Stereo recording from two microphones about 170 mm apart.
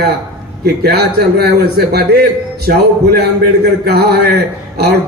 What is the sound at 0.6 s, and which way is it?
A man's voice, 70° right (ahead or behind).